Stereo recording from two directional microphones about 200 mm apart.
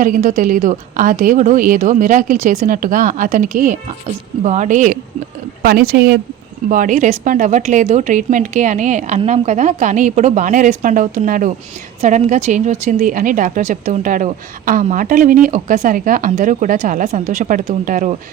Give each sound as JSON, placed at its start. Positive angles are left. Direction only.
{"t": 0.0, "sound": "a woman's voice", "side_deg": -40}